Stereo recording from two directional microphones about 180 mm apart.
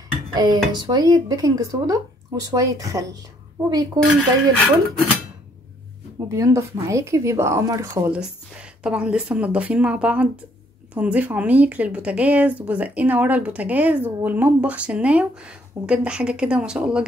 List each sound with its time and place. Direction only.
0.3 s speech: 20° right (ahead or behind)
4.6 s speech: 5° left (ahead or behind)
6.2 s speech: 15° right (ahead or behind)